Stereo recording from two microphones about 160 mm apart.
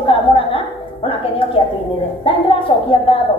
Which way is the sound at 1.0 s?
35° left (ahead or behind).